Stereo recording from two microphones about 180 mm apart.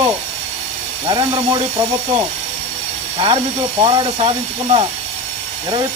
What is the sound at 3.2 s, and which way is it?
Speech, 25° right (ahead or behind).